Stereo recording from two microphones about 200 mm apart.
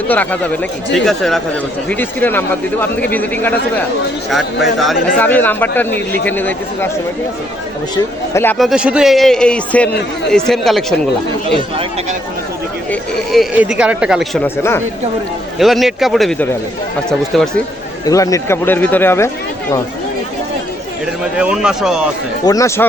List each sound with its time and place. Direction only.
0.1 s speech: 5° left (ahead or behind)
8.3 s speech: 10° left (ahead or behind)
8.5 s speech: centre (ahead or behind)
12.9 s speech: centre (ahead or behind)
14.4 s speech: 10° left (ahead or behind)
15.5 s speech: centre (ahead or behind)
18.0 s speech: 15° left (ahead or behind)
21.3 s speech: 5° right (ahead or behind)
22.4 s speech: 15° left (ahead or behind)